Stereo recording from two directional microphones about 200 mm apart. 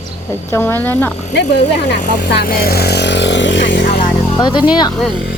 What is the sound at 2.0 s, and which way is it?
Speech, 40° left (ahead or behind).